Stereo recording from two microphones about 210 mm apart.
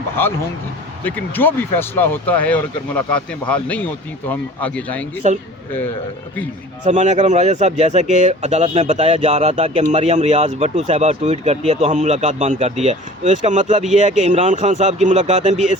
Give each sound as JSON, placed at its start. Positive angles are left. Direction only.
{"t": 0.2, "sound": "speech", "side_deg": 10}
{"t": 5.2, "sound": "speech", "side_deg": -35}
{"t": 6.8, "sound": "speech", "side_deg": -35}